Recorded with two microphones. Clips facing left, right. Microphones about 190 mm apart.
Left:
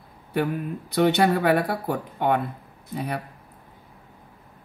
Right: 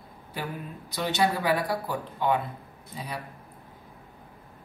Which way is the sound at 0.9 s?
60° left (ahead or behind).